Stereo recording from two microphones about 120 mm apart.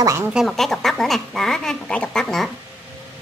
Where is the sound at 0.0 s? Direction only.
25° right (ahead or behind).